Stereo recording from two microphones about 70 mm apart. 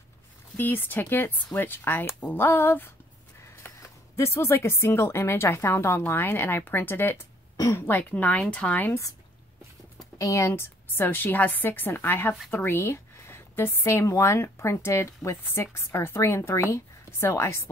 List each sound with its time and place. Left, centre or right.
0.6 s a woman's voice: left
3.6 s a sound: left
4.2 s a woman's voice: left
8.0 s a woman's voice: left
9.9 s a sound: left
10.5 s a woman's voice: left